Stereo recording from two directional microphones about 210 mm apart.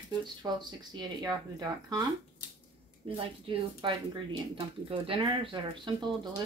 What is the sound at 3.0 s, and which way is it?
Speech, 25° right (ahead or behind).